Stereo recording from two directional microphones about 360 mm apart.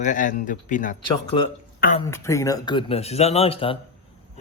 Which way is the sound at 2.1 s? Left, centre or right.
Centre.